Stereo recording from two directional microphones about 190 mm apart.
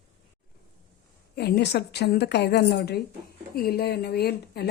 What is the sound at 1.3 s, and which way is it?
Speech, 60° left (ahead or behind).